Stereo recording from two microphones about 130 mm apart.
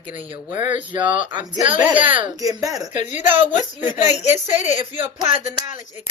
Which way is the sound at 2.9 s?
60° left (ahead or behind).